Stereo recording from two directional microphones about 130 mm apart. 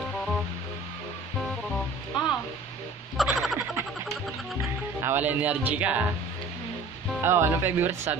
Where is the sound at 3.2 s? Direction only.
Centre (ahead or behind).